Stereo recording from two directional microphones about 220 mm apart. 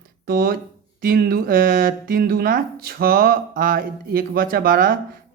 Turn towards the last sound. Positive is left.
turn(degrees=-40)  # may be behind; listen again after turning